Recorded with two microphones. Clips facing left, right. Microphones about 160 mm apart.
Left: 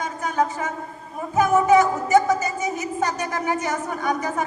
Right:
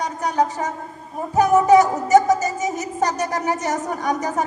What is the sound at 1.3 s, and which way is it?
Speech, 40° right (ahead or behind).